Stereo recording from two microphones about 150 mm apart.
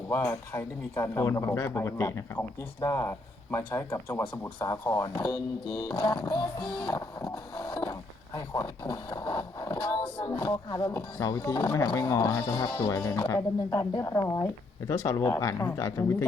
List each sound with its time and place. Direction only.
0.1 s speech: 15° left (ahead or behind)
6.1 s music: 30° left (ahead or behind)
6.8 s speech: 25° left (ahead or behind)